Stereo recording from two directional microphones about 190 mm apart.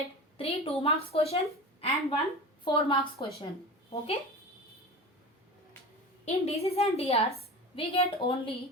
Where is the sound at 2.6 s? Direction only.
25° left (ahead or behind).